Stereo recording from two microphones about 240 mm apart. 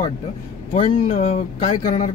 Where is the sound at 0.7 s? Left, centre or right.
Left.